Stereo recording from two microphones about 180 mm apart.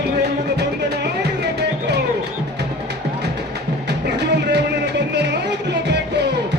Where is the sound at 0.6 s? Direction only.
70° right (ahead or behind).